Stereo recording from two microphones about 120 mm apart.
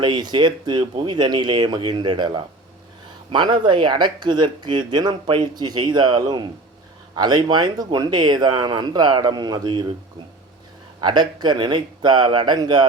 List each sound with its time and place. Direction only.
0.0 s speech: 40° right (ahead or behind)
11.0 s speech: 35° right (ahead or behind)